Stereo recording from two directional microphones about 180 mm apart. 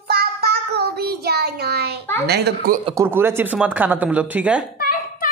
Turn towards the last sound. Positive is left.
turn(degrees=55)  # may be behind; listen again after turning